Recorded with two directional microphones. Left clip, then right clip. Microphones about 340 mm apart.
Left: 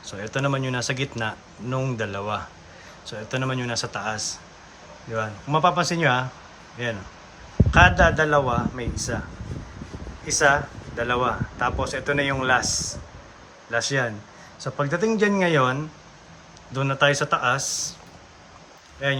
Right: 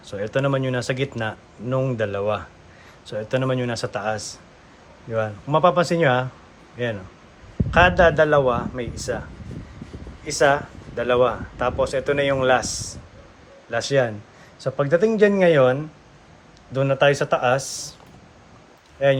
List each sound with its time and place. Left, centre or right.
0.0 s speech: centre
10.2 s speech: centre
13.7 s speech: centre
19.0 s speech: centre